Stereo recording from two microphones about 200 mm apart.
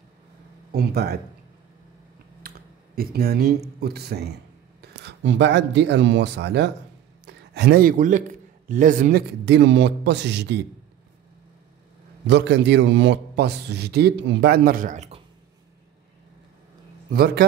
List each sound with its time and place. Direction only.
0.7 s speech: 50° right (ahead or behind)
2.4 s computer keyboard: 45° right (ahead or behind)
3.0 s a man's voice: 50° right (ahead or behind)
9.5 s a man's voice: 60° right (ahead or behind)
12.3 s a man's voice: 60° right (ahead or behind); by 15.2 s 30° right (ahead or behind)
17.1 s speech: 50° right (ahead or behind)